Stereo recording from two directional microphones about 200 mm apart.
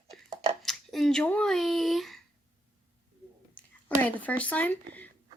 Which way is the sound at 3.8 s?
10° left (ahead or behind).